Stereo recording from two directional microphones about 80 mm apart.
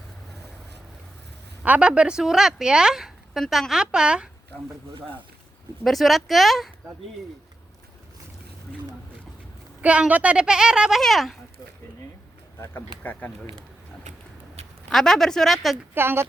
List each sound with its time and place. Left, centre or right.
1.6 s a woman's voice: centre
5.8 s speech: centre
9.8 s a woman's voice: centre
11.0 s speech: centre
13.0 s speech: left
14.8 s speech: centre
16.0 s speech: right